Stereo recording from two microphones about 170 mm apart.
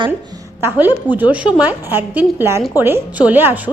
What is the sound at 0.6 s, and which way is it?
A woman's voice, 10° right (ahead or behind).